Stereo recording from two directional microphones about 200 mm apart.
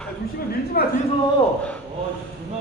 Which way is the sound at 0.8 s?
50° left (ahead or behind).